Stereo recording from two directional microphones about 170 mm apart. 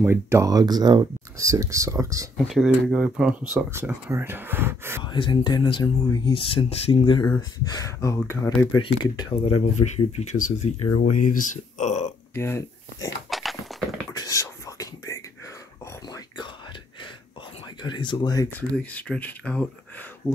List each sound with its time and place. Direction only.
0.0 s speech: 15° right (ahead or behind)
2.3 s speech: centre (ahead or behind)
5.0 s speech: 25° left (ahead or behind); by 12.1 s 45° left (ahead or behind)
12.4 s speech: 15° left (ahead or behind)
13.3 s a sound: centre (ahead or behind)
14.1 s whispering: 20° left (ahead or behind)
17.8 s speech: 25° left (ahead or behind)
18.8 s speech: 10° left (ahead or behind)